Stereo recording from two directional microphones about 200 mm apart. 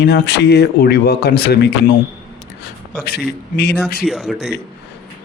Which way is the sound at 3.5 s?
55° left (ahead or behind).